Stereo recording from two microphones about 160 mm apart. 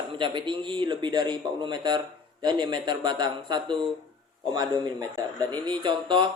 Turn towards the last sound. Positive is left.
turn(degrees=-30)  # may be behind; listen again after turning